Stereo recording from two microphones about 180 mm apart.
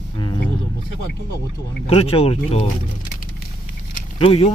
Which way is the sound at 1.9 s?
35° left (ahead or behind).